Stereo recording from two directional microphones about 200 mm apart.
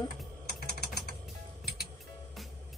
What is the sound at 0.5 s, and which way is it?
Typing, 50° left (ahead or behind).